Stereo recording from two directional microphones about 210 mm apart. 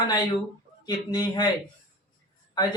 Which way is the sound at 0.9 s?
20° left (ahead or behind).